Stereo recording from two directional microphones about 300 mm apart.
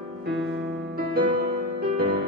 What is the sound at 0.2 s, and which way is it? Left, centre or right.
Music, right.